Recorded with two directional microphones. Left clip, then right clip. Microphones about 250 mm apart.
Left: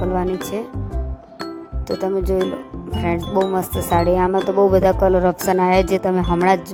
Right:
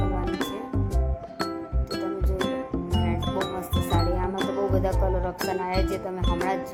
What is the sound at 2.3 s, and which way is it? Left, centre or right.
Speech, left.